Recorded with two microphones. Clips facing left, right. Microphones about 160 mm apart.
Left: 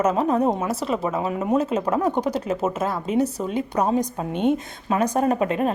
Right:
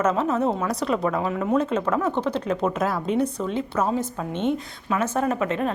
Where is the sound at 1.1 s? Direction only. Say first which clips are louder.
Left 1 dB; 20° left (ahead or behind).